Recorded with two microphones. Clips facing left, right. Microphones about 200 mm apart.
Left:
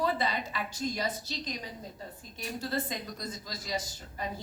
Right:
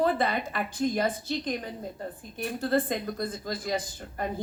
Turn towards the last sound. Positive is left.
turn(degrees=-55)  # may be behind; listen again after turning